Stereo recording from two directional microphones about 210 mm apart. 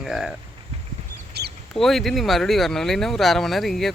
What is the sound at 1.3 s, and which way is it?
Duck, 50° right (ahead or behind).